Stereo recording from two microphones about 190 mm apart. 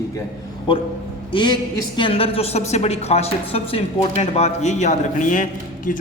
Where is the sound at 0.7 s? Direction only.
25° left (ahead or behind); by 6.0 s 45° left (ahead or behind).